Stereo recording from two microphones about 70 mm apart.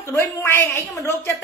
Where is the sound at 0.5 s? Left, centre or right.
Left.